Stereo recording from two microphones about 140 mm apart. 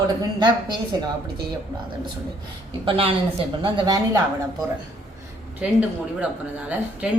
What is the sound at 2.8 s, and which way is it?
A woman's voice, 40° right (ahead or behind).